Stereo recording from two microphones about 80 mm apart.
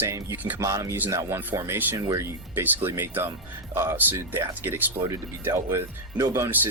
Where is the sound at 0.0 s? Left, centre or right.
Right.